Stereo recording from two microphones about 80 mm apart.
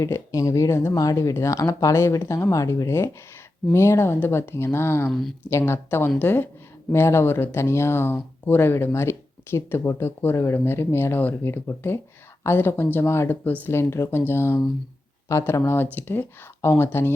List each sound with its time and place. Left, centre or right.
0.0 s speech: left
1.1 s speech: left